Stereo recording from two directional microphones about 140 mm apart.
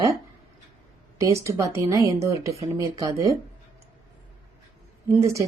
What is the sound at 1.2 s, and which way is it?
Speech, 20° right (ahead or behind).